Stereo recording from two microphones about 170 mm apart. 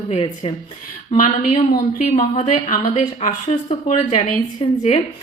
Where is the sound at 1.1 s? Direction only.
50° left (ahead or behind).